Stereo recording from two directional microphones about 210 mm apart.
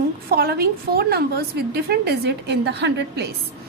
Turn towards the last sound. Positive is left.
turn(degrees=-55)  # may be behind; listen again after turning